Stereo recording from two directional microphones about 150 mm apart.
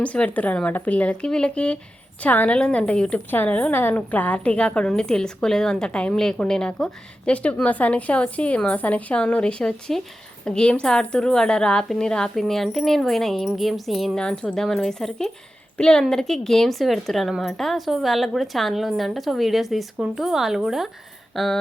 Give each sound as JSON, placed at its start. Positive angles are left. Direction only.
{"t": 0.0, "sound": "a woman's voice", "side_deg": 10}